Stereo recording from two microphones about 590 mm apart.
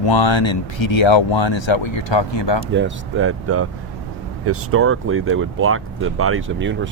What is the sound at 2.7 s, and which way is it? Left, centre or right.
Speech, centre.